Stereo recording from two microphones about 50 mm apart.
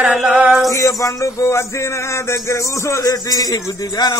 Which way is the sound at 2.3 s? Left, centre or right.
Left.